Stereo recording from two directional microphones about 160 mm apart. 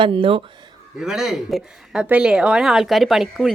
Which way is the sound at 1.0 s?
5° right (ahead or behind).